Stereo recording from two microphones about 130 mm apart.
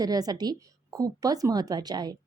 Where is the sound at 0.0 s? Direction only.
30° right (ahead or behind).